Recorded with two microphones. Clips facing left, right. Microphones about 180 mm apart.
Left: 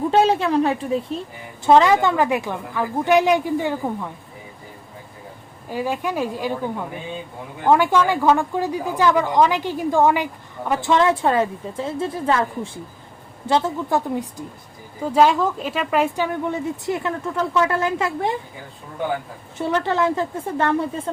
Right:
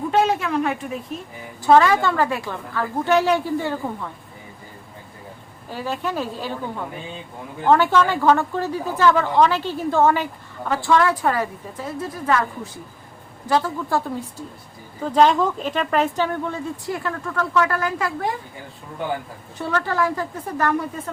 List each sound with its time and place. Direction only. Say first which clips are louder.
0.1 s a woman's voice: left 2 dB; 30° left (ahead or behind)
1.6 s speech: left 1 dB; 20° left (ahead or behind)
5.7 s speech: left 2 dB; 10° left (ahead or behind)
19.5 s speech: left 2 dB; 20° left (ahead or behind)